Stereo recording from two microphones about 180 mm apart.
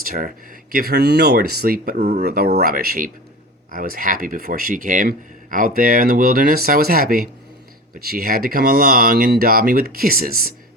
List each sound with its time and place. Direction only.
0.0 s speech: 50° right (ahead or behind)